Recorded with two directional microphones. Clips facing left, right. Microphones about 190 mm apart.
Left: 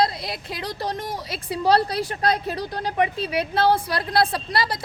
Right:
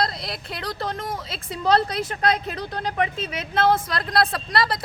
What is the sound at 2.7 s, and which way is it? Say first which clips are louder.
Speech: left 1 dB; 10° left (ahead or behind).